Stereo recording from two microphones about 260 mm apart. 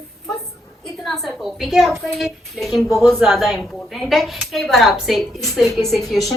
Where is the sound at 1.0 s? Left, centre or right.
Centre.